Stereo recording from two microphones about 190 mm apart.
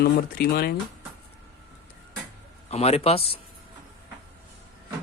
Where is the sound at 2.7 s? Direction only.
35° left (ahead or behind).